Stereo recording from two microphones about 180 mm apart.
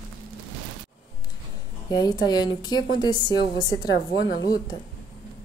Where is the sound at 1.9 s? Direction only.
20° left (ahead or behind).